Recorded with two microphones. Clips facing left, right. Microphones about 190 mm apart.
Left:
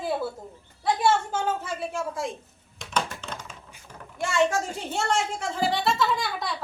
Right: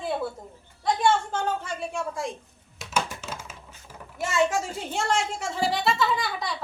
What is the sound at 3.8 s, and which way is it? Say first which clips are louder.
Speech: left 1 dB; 5° right (ahead or behind).